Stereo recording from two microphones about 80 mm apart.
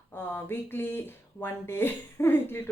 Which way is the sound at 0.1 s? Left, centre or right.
Left.